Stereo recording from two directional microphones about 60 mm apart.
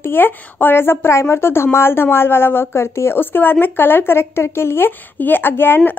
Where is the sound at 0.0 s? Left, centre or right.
Left.